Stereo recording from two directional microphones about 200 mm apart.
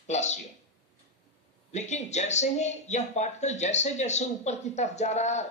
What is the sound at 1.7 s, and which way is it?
Speech, 35° left (ahead or behind).